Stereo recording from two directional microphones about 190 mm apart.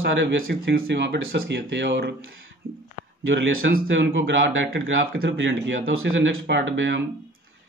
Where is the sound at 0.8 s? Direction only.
65° right (ahead or behind).